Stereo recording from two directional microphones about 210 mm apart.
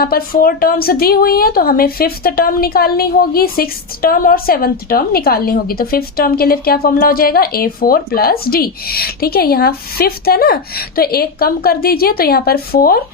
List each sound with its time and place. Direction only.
0.0 s a woman's voice: 45° left (ahead or behind)